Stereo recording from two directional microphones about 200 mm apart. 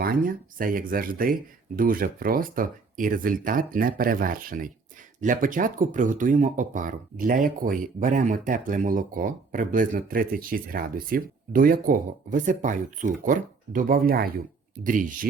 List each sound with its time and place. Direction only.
0.0 s speech: 45° right (ahead or behind)